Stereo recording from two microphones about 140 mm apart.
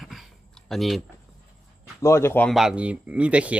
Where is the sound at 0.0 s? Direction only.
Centre (ahead or behind).